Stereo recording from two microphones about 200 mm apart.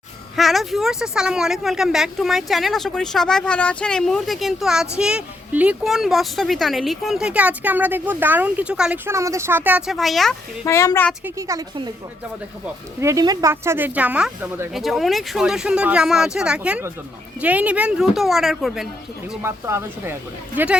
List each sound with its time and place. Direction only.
0.3 s speech: centre (ahead or behind)
10.7 s speech: 15° left (ahead or behind)
11.3 s speech: 15° right (ahead or behind)
13.0 s speech: 15° right (ahead or behind)
19.3 s speech: 10° right (ahead or behind)